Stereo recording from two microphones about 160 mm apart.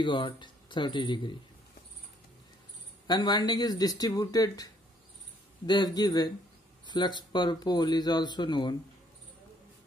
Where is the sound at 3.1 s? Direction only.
25° left (ahead or behind).